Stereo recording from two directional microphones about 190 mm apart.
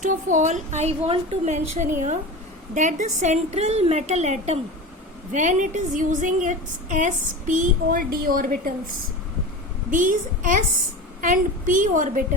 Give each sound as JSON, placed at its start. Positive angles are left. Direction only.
{"t": 0.0, "sound": "a woman's voice", "side_deg": -40}
{"t": 9.9, "sound": "a woman's voice", "side_deg": -45}